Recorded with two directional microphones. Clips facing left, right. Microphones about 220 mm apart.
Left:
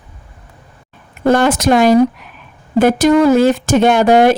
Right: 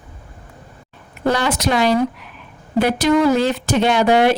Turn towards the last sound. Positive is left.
turn(degrees=45)  # may be behind; listen again after turning